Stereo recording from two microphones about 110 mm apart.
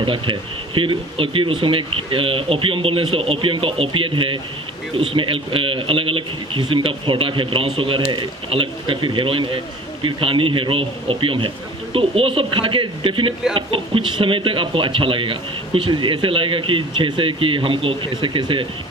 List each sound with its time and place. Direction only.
0.0 s speech: 50° right (ahead or behind)